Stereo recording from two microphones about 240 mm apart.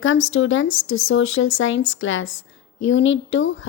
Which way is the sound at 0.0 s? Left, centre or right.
Left.